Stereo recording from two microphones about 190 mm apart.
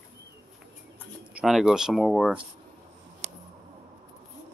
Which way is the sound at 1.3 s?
Centre (ahead or behind).